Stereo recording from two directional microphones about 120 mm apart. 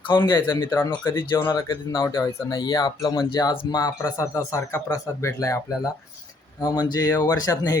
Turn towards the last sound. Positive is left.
turn(degrees=35)  # may be behind; listen again after turning